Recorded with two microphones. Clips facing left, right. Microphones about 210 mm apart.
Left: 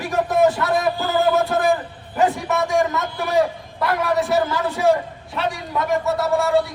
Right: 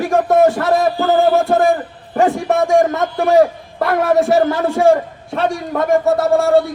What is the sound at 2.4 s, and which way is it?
A man's voice, 50° right (ahead or behind).